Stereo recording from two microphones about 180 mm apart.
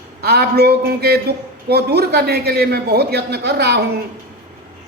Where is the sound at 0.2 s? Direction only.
60° right (ahead or behind).